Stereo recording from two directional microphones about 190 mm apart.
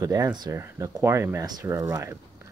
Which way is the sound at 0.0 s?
20° right (ahead or behind).